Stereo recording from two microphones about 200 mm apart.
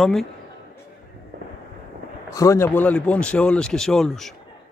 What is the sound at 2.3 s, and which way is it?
Speech, 15° left (ahead or behind).